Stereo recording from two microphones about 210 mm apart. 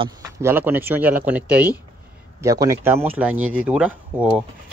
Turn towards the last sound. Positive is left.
turn(degrees=-5)  # may be behind; listen again after turning